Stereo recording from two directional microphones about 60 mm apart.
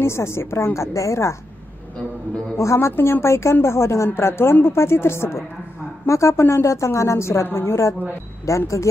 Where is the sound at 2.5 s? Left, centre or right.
Left.